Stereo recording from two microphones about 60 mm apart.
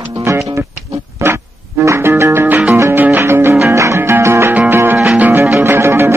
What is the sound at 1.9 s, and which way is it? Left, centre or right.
Music, right.